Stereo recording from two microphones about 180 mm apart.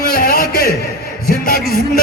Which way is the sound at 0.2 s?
55° left (ahead or behind).